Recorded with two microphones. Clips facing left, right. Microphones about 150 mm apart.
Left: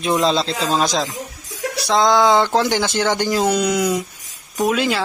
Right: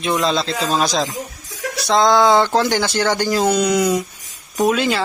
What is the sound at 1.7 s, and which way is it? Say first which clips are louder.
Speech: right 1 dB; 10° left (ahead or behind).